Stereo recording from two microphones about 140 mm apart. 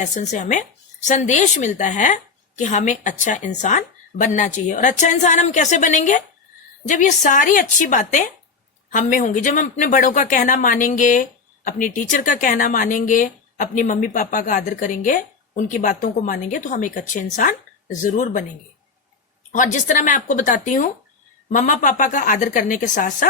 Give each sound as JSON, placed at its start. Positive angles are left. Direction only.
{"t": 0.0, "sound": "a woman's voice", "side_deg": 60}
{"t": 19.5, "sound": "a woman's voice", "side_deg": 65}